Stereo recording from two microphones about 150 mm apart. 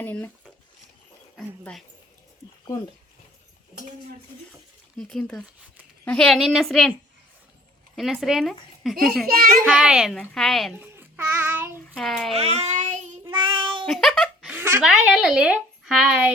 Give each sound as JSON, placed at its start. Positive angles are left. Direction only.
{"t": 0.0, "sound": "speech", "side_deg": 15}
{"t": 4.9, "sound": "a woman's voice", "side_deg": 5}
{"t": 7.9, "sound": "a woman's voice", "side_deg": 0}
{"t": 9.2, "sound": "a child's voice", "side_deg": -80}
{"t": 9.6, "sound": "a woman's voice", "side_deg": -5}
{"t": 10.8, "sound": "child singing", "side_deg": -15}
{"t": 11.9, "sound": "a woman's voice", "side_deg": 0}
{"t": 12.3, "sound": "child singing", "side_deg": -45}
{"t": 13.2, "sound": "child singing", "side_deg": -35}
{"t": 13.8, "sound": "a sound", "side_deg": 5}
{"t": 14.5, "sound": "a sound", "side_deg": -15}
{"t": 14.8, "sound": "a woman's voice", "side_deg": -5}